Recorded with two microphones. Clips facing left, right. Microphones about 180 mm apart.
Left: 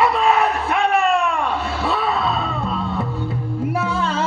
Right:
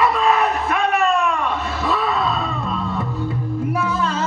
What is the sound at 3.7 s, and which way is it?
Music, 30° left (ahead or behind).